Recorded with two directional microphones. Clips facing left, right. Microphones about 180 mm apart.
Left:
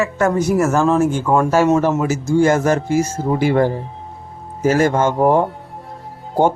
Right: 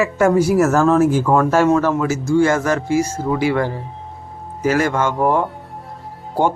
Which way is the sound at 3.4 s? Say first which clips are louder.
Left 6 dB; 45° left (ahead or behind).